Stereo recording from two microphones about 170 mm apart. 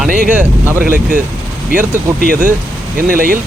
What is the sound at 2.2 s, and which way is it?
Speech, 55° right (ahead or behind).